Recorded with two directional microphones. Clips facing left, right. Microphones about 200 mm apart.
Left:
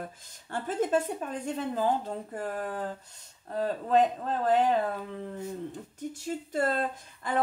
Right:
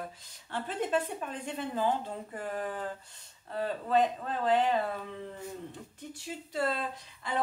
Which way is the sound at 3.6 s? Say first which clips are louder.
Left 3 dB; 45° left (ahead or behind).